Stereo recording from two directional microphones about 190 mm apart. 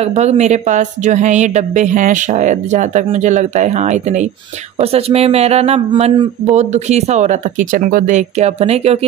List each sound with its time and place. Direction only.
0.0 s a woman's voice: 35° right (ahead or behind)